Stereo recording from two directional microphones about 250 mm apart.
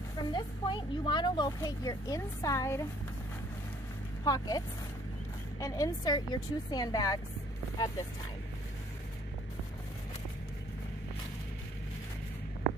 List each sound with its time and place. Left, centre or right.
0.3 s speech: centre
4.2 s speech: centre